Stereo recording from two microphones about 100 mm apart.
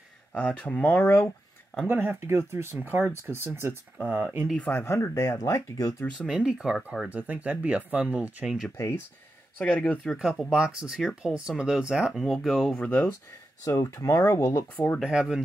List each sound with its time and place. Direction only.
0.3 s speech: 10° left (ahead or behind)
1.9 s speech: 20° right (ahead or behind)
4.6 s speech: 20° left (ahead or behind); by 5.9 s 35° left (ahead or behind)
6.1 s speech: 10° right (ahead or behind)
9.6 s speech: 15° left (ahead or behind)
10.0 s speech: 5° right (ahead or behind)
13.7 s speech: 30° left (ahead or behind)
15.0 s speech: 5° right (ahead or behind)